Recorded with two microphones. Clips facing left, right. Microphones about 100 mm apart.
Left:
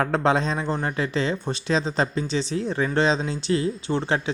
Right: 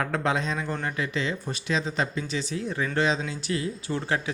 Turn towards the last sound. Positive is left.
turn(degrees=25)  # may be behind; listen again after turning